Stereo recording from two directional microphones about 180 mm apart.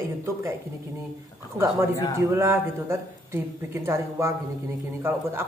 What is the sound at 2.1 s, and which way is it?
Speech, 15° right (ahead or behind).